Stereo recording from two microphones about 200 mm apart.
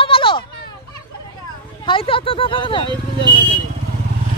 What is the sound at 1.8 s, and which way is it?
Speech, 25° left (ahead or behind).